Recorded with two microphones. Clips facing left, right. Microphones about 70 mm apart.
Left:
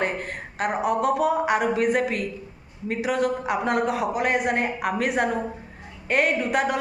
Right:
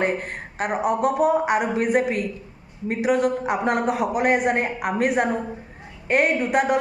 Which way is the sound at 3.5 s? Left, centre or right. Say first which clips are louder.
Right 1 dB; right.